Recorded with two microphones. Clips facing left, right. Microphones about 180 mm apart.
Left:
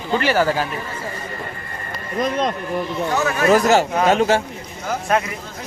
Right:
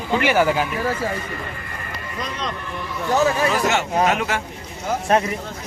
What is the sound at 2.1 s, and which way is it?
Speech, 50° left (ahead or behind).